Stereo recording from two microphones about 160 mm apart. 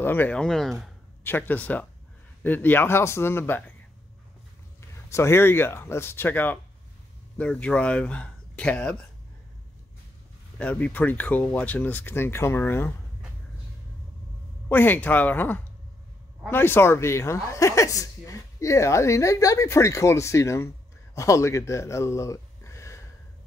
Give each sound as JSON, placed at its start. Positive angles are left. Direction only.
{"t": 0.0, "sound": "speech", "side_deg": 10}
{"t": 1.2, "sound": "speech", "side_deg": 15}
{"t": 4.7, "sound": "speech", "side_deg": 15}
{"t": 10.6, "sound": "speech", "side_deg": 10}
{"t": 14.7, "sound": "speech", "side_deg": 10}